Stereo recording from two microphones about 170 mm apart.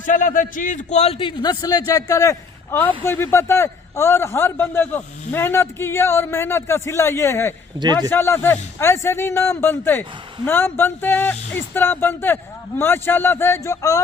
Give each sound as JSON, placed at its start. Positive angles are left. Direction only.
{"t": 0.0, "sound": "a man's voice", "side_deg": 50}
{"t": 1.4, "sound": "a man's voice", "side_deg": 25}
{"t": 7.8, "sound": "speech", "side_deg": -25}
{"t": 8.1, "sound": "a man's voice", "side_deg": 15}